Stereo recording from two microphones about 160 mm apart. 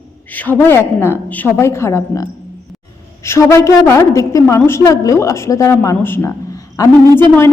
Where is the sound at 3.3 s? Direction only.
15° left (ahead or behind).